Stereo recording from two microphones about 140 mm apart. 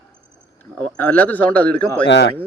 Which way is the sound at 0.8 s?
15° left (ahead or behind).